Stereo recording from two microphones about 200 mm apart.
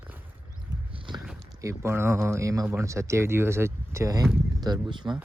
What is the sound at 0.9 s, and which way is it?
Walk, 25° right (ahead or behind).